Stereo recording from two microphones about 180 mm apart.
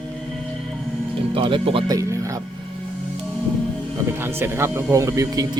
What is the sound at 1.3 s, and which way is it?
Speech, 30° right (ahead or behind).